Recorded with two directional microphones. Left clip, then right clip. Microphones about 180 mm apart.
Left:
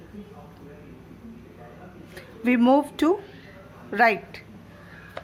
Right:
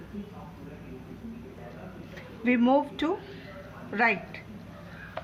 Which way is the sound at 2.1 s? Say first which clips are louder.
Left 3 dB; 45° left (ahead or behind).